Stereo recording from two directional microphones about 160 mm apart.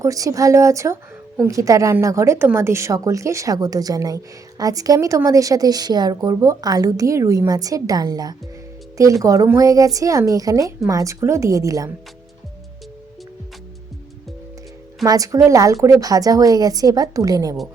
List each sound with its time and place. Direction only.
0.0 s a woman's voice: 20° right (ahead or behind)
15.0 s a woman's voice: 20° right (ahead or behind)